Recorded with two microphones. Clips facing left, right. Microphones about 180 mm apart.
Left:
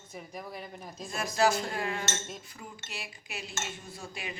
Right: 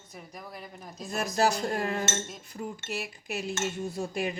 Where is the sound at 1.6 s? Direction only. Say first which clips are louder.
Right 4 dB; 45° right (ahead or behind).